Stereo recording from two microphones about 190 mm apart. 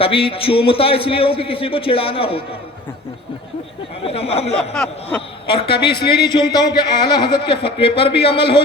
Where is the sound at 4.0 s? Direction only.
30° left (ahead or behind).